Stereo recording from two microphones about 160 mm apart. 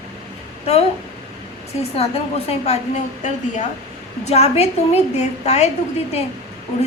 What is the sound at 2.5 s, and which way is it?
A woman's voice, 45° left (ahead or behind).